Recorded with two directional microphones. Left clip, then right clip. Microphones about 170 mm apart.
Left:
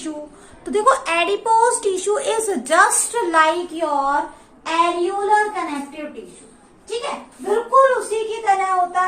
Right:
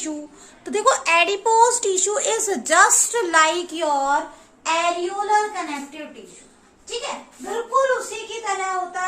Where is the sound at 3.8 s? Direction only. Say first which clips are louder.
Even; 80° right.